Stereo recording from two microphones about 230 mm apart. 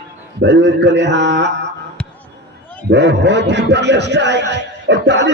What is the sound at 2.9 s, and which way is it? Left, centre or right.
A man's voice, right.